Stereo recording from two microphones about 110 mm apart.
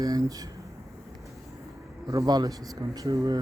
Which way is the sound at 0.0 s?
35° right (ahead or behind).